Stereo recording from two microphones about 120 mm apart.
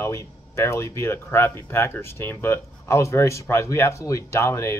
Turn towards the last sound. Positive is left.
turn(degrees=25)  # may be behind; listen again after turning